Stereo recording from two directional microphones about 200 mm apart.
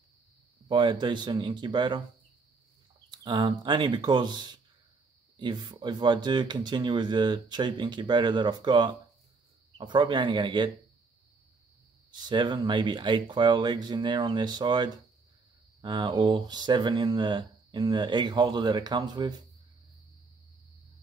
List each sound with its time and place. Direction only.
0.7 s speech: 20° right (ahead or behind)
3.1 s speech: 20° right (ahead or behind)
12.1 s speech: 20° right (ahead or behind)